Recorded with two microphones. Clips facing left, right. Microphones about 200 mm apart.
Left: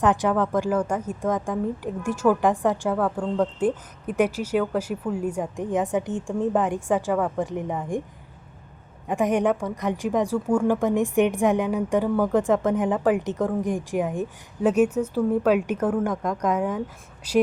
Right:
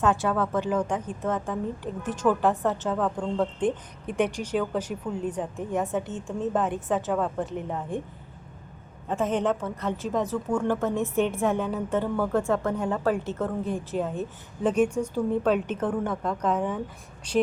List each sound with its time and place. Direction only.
0.0 s a woman's voice: 15° left (ahead or behind)
9.0 s a woman's voice: 15° left (ahead or behind)